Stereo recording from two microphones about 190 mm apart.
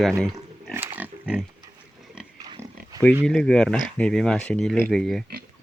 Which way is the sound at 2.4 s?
20° right (ahead or behind).